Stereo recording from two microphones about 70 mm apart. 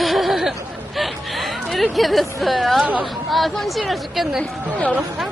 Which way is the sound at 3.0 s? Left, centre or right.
Centre.